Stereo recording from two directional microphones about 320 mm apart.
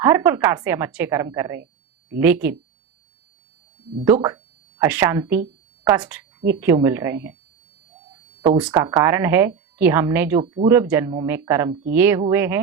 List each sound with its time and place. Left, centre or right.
0.0 s speech: centre
4.0 s speech: centre
8.4 s speech: centre